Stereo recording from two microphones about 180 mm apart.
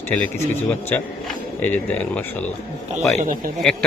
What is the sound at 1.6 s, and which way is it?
Speech, 10° left (ahead or behind).